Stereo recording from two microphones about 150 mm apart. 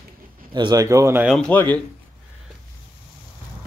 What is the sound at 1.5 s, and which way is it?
Speech, 10° left (ahead or behind).